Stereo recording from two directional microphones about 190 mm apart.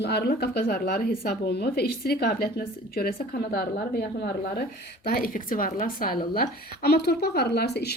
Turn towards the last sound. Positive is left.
turn(degrees=60)  # may be behind; listen again after turning